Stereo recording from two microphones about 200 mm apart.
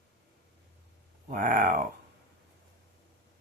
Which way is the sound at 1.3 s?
40° right (ahead or behind).